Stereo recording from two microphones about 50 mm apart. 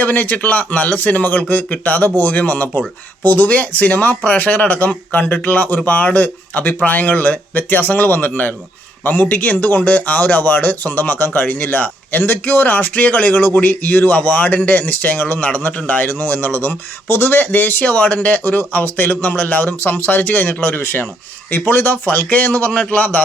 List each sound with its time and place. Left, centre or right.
0.0 s speech: left